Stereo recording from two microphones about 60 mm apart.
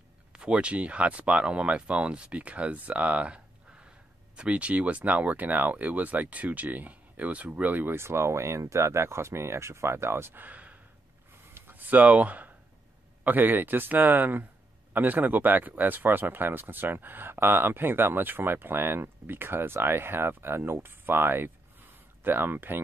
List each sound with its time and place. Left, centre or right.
0.3 s speech: centre
7.9 s speech: right
10.4 s a sound: right
11.5 s speech: right